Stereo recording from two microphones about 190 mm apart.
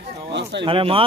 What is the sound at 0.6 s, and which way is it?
Speech, 25° right (ahead or behind).